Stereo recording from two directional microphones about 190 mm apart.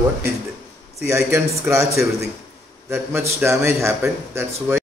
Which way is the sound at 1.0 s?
15° right (ahead or behind).